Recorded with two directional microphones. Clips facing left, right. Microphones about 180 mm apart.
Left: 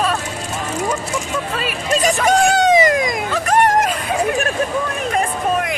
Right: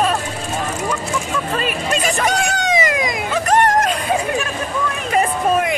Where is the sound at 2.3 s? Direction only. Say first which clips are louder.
Left 6 dB; 45° left (ahead or behind).